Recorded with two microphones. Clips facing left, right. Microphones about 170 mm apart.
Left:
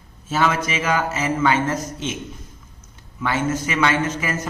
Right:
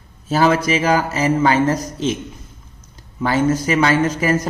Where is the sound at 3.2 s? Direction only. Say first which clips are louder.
Right 5 dB; 35° right (ahead or behind).